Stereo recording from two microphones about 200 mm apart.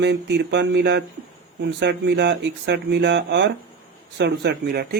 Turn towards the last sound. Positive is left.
turn(degrees=-50)  # may be behind; listen again after turning